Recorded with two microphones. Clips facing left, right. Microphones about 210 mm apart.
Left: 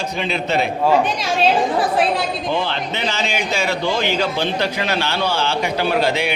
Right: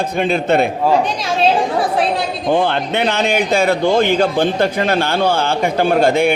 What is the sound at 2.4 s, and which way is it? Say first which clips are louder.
Speech: right 6 dB; 50° right (ahead or behind).